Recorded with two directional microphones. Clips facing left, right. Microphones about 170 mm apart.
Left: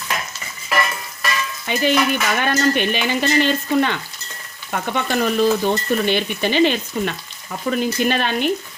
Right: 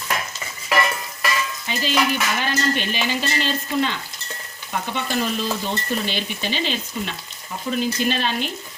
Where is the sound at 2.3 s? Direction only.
55° left (ahead or behind).